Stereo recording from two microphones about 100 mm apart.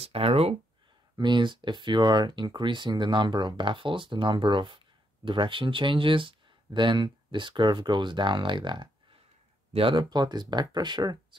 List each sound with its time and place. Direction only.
0.0 s speech: 75° right (ahead or behind)
1.1 s speech: 50° right (ahead or behind)
9.7 s speech: 65° right (ahead or behind)
10.0 s speech: 45° right (ahead or behind)